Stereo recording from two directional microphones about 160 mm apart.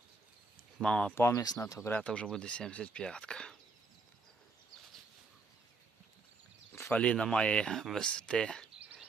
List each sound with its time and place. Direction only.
0.8 s speech: 5° left (ahead or behind)
6.8 s speech: 5° left (ahead or behind)
8.8 s a sound: 10° right (ahead or behind)